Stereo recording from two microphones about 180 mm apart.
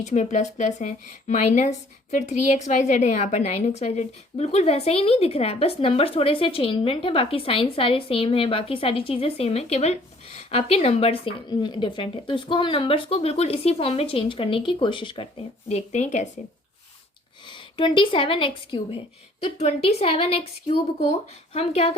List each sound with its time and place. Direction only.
0.0 s a woman's voice: 40° left (ahead or behind)
15.7 s a woman's voice: 40° left (ahead or behind)
17.5 s a woman's voice: 25° left (ahead or behind)